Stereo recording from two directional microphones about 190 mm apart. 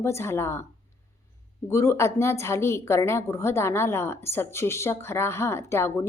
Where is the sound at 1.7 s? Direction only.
15° left (ahead or behind).